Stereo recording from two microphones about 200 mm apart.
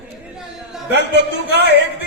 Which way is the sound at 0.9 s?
60° right (ahead or behind).